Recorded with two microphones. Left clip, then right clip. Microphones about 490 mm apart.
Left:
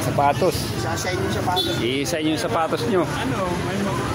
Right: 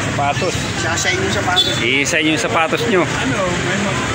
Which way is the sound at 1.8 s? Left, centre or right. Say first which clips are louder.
Right 8 dB; left.